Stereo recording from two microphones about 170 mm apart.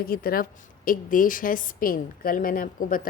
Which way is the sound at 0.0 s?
60° left (ahead or behind).